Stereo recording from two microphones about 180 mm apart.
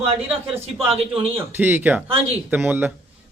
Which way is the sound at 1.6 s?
10° right (ahead or behind).